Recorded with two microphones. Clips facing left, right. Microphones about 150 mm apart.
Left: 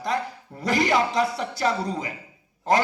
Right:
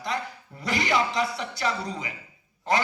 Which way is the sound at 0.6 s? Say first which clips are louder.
Left 4 dB; 45° left (ahead or behind).